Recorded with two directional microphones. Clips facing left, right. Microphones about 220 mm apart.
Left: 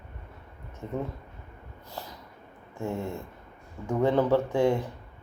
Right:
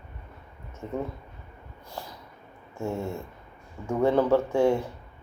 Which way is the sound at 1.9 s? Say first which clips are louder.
Right 1 dB; 40° left (ahead or behind).